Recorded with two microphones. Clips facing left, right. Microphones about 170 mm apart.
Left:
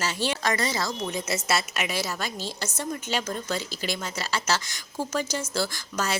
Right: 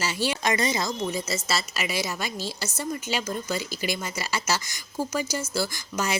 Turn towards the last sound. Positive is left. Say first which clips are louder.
# right 1 dB
turn(degrees=-15)  # may be behind; listen again after turning